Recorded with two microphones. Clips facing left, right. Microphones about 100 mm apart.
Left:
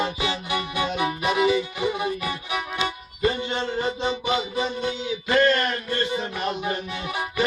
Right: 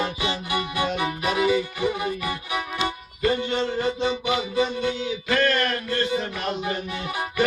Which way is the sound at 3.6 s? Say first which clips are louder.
Right 2 dB; 20° left (ahead or behind).